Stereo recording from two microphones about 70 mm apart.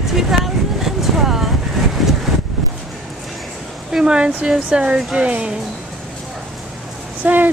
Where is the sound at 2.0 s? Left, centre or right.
Centre.